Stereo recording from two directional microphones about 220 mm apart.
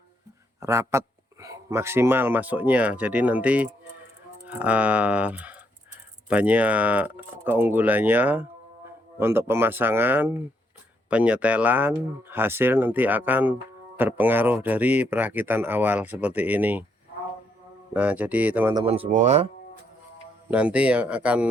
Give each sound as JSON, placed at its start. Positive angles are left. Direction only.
{"t": 0.6, "sound": "speech", "side_deg": -10}
{"t": 17.9, "sound": "speech", "side_deg": -5}
{"t": 18.7, "sound": "speech", "side_deg": -20}
{"t": 20.5, "sound": "speech", "side_deg": -5}